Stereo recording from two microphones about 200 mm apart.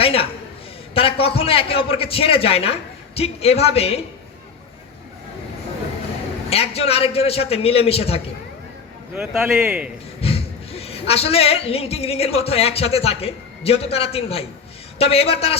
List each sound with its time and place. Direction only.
0.0 s a sound: 30° left (ahead or behind)
1.2 s a man's voice: 30° left (ahead or behind)
6.5 s a man's voice: 30° left (ahead or behind)
9.1 s a man's voice: centre (ahead or behind)
10.2 s a woman's voice: 30° left (ahead or behind)